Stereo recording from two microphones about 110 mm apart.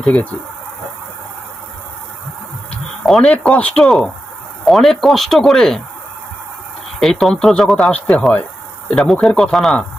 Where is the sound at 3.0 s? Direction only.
Centre (ahead or behind).